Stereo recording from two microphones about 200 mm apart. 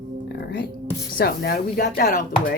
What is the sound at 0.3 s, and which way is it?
Music, 55° left (ahead or behind).